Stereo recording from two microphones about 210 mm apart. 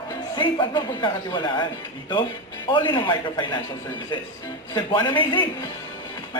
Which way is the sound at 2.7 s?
20° left (ahead or behind).